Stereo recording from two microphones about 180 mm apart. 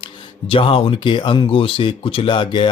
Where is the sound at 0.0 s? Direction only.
30° left (ahead or behind).